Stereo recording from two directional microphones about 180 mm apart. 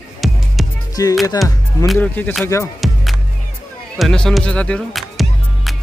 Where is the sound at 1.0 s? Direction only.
20° left (ahead or behind).